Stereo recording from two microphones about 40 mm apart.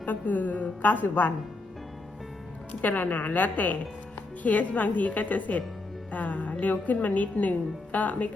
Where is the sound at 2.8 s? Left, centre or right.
Left.